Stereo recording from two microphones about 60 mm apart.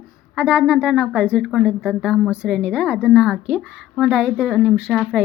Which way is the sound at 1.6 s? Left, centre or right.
Centre.